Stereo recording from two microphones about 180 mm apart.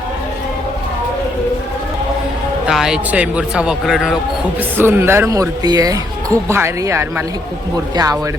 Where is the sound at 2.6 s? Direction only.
5° right (ahead or behind).